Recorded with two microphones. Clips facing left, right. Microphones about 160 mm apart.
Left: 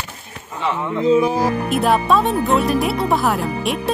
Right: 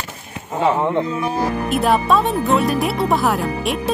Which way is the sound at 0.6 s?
35° right (ahead or behind).